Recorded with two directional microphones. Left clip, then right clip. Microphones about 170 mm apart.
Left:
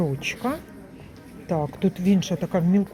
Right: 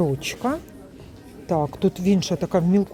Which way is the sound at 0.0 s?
20° right (ahead or behind).